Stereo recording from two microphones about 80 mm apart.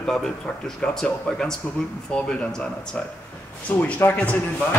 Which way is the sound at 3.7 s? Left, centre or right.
Left.